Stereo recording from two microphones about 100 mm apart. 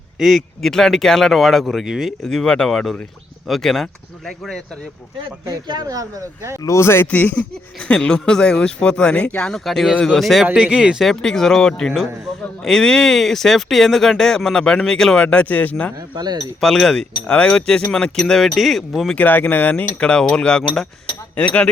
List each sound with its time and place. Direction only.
0.2 s speech: centre (ahead or behind)
5.5 s speech: 40° right (ahead or behind)
6.6 s speech: 30° left (ahead or behind)
7.1 s speech: 15° left (ahead or behind)
9.6 s speech: centre (ahead or behind)
11.1 s speech: 5° left (ahead or behind)
16.0 s speech: 45° right (ahead or behind)
16.6 s speech: 5° left (ahead or behind)
19.1 s speech: 20° left (ahead or behind)